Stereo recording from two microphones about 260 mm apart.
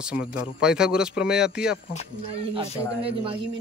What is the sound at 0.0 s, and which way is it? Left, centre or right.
Speech, centre.